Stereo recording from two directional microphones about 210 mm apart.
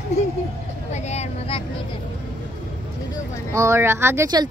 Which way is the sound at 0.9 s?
30° left (ahead or behind).